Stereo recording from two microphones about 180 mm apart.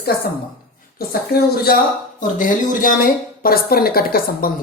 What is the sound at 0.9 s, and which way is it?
A woman's voice, 55° left (ahead or behind).